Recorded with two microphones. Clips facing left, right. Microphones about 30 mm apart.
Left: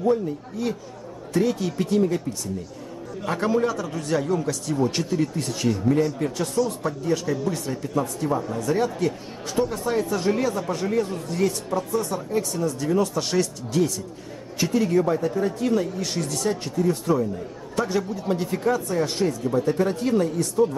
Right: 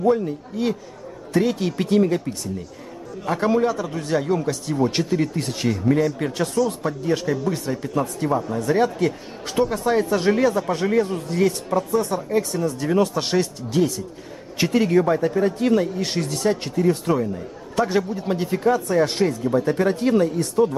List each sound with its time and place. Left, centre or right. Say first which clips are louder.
0.0 s speech: right 3 dB; right
3.4 s speech: right 3 dB; centre; by 6.5 s right
6.9 s speech: right 2 dB; right
8.0 s speech: right 2 dB; right
11.9 s speech: right 4 dB; right
14.6 s speech: right 3 dB; right
16.6 s speech: right 2 dB; right
18.3 s speech: right 3 dB; centre
18.9 s speech: right 5 dB; right
19.2 s speech: right 2 dB; right